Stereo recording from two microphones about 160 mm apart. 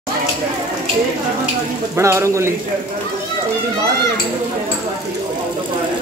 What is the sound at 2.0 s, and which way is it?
Speech, 15° right (ahead or behind).